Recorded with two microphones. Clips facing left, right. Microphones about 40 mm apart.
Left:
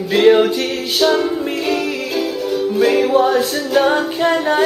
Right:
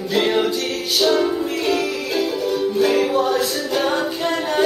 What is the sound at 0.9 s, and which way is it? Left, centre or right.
Music, centre.